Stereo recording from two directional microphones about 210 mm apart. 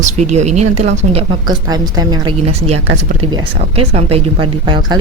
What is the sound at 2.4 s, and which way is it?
Speech, 30° right (ahead or behind).